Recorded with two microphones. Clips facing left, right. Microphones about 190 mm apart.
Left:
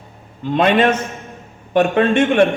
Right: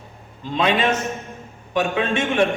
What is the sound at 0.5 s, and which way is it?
A man's voice, 55° left (ahead or behind).